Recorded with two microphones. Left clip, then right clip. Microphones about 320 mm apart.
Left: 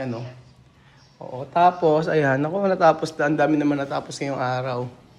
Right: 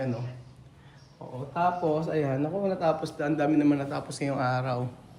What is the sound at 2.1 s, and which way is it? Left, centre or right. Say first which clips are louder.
A man's voice: left 8 dB; left.